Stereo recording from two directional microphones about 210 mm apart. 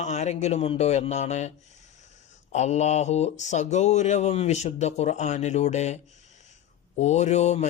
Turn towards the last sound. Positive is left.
turn(degrees=30)  # may be behind; listen again after turning